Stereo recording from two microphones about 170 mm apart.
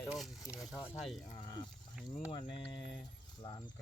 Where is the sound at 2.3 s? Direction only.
30° left (ahead or behind).